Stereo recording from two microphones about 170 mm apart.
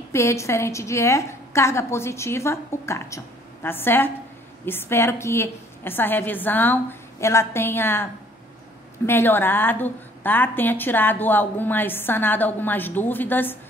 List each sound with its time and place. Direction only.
0.1 s a woman's voice: 15° left (ahead or behind)